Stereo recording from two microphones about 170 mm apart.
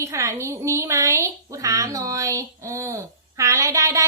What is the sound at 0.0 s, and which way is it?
A woman's voice, 15° right (ahead or behind).